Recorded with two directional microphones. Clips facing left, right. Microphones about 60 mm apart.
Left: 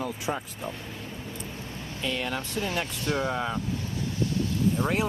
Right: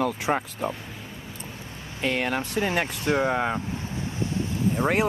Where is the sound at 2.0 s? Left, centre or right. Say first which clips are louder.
Right 5 dB; right.